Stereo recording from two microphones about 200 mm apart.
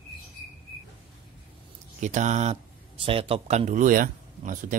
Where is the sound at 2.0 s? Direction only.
35° right (ahead or behind).